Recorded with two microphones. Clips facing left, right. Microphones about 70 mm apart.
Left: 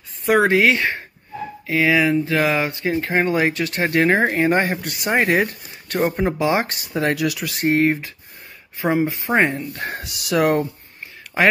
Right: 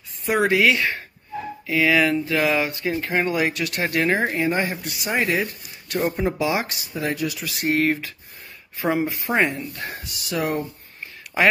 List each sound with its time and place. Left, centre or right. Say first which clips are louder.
0.4 s speech: left 1 dB; left
6.9 s speech: left 5 dB; left
7.4 s speech: left 4 dB; left
7.7 s speech: left 2 dB; left
9.9 s speech: left 8 dB; left